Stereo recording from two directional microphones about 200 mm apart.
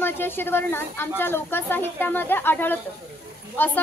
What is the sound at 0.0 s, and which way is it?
Speech, 10° left (ahead or behind).